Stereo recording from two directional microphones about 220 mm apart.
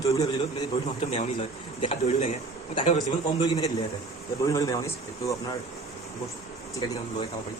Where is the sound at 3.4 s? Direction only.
15° left (ahead or behind).